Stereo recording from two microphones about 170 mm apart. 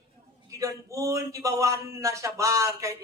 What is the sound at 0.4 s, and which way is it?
A man's voice, 20° right (ahead or behind).